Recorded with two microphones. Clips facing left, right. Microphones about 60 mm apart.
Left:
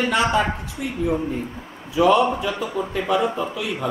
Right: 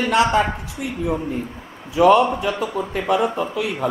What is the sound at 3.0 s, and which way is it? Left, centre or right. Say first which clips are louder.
Speech: right 2 dB; right.